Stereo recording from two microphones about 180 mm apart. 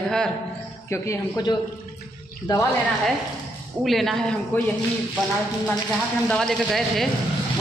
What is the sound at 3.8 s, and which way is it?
Speech, centre (ahead or behind).